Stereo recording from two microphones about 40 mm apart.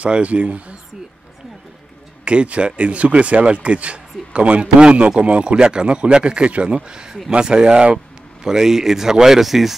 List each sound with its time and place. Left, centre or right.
0.0 s speech: right
2.2 s speech: right
6.9 s speech: centre
8.5 s speech: centre